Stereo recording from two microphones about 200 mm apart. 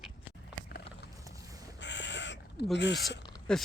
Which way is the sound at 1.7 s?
60° left (ahead or behind).